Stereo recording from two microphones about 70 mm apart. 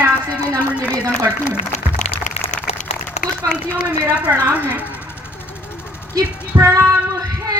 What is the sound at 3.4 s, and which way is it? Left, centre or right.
Speech, right.